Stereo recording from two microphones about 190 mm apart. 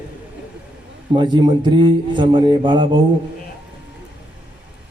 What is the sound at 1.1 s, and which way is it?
A man's voice, 25° right (ahead or behind).